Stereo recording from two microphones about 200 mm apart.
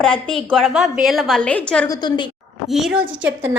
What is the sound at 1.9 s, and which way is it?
Speech, 20° left (ahead or behind).